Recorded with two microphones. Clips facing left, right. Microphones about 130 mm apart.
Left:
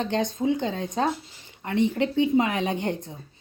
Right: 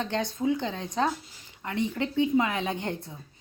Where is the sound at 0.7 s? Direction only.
50° left (ahead or behind).